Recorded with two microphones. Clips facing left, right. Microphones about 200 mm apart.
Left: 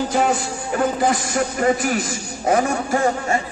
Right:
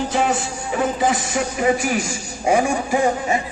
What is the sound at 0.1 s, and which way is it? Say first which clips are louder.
A man's voice: left 1 dB; centre (ahead or behind).